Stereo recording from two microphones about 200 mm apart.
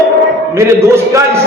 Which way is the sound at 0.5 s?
15° right (ahead or behind).